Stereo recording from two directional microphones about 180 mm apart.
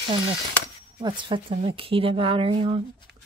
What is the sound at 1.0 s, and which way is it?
A woman's voice, 25° right (ahead or behind).